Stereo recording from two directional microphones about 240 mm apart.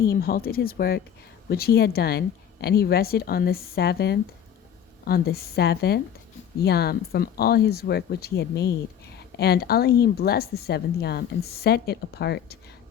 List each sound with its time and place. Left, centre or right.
0.0 s a woman's voice: left